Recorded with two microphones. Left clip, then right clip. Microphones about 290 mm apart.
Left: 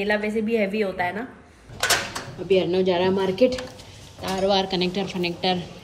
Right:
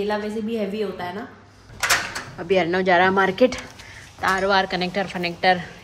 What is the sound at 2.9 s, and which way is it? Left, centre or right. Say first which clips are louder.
Speech: right 5 dB; right.